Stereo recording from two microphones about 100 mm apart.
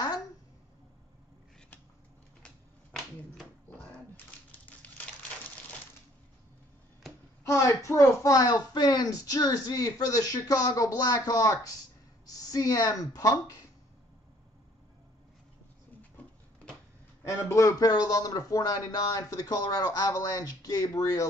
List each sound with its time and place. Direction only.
2.4 s a sound: 5° left (ahead or behind)
4.5 s typewriter: 15° left (ahead or behind)
7.4 s speech: 30° left (ahead or behind)
17.2 s speech: 30° left (ahead or behind)